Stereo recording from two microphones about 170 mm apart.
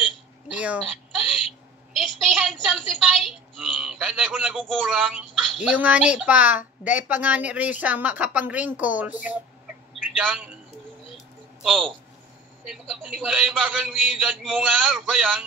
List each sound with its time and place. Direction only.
0.5 s a sound: 5° right (ahead or behind)
6.8 s a woman's voice: 10° right (ahead or behind)
11.6 s a man's voice: centre (ahead or behind)